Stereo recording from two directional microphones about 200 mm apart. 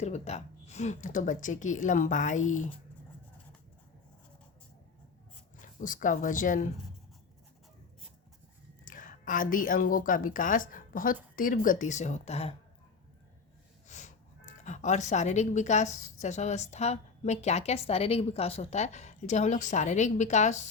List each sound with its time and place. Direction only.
0.0 s a woman's voice: 35° left (ahead or behind)
5.5 s speech: 40° left (ahead or behind)
8.8 s a woman's voice: 40° left (ahead or behind)
13.8 s a sound: 35° left (ahead or behind)
16.2 s a woman's voice: 35° left (ahead or behind)